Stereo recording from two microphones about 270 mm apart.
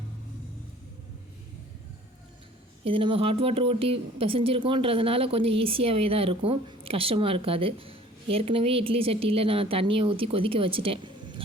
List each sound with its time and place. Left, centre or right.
2.8 s speech: centre